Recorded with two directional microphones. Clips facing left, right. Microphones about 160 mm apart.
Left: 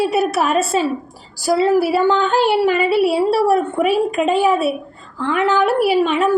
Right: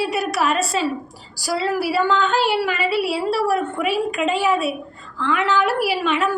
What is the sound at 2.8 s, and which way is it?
Speech, 50° left (ahead or behind).